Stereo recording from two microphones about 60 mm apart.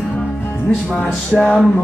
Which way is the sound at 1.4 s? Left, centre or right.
Centre.